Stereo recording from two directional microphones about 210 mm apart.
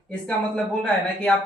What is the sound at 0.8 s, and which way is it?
Speech, 5° left (ahead or behind).